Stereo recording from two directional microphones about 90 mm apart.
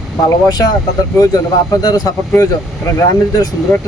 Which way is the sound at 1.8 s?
45° left (ahead or behind).